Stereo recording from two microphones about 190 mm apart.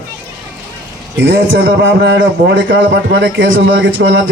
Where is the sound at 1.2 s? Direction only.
80° right.